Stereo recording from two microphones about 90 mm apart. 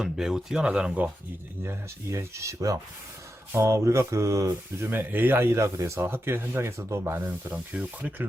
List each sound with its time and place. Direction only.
0.0 s speech: 5° right (ahead or behind)
1.6 s speech: 30° right (ahead or behind)
4.9 s speech: 20° right (ahead or behind)